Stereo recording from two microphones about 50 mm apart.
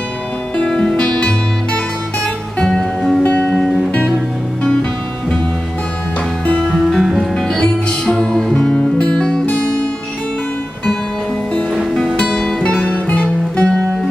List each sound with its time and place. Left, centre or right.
0.7 s music: centre
3.3 s music: left
3.5 s music: centre
6.7 s music: centre
7.5 s music: centre
8.7 s music: left
11.9 s music: centre
12.8 s music: left